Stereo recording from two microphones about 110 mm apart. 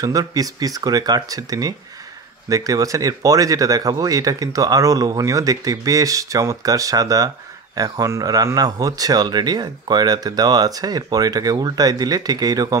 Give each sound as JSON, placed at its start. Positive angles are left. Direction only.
{"t": 0.0, "sound": "speech", "side_deg": -35}